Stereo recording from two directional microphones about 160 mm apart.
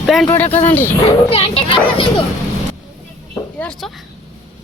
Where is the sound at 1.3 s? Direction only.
35° left (ahead or behind).